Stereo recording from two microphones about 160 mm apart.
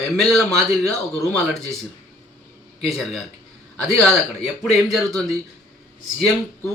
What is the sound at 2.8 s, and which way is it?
Speech, centre (ahead or behind).